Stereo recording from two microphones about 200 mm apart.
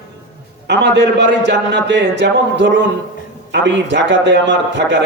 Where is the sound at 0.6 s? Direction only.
60° right (ahead or behind).